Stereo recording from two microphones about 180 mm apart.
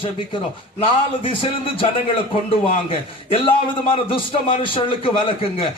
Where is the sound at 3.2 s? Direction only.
30° left (ahead or behind).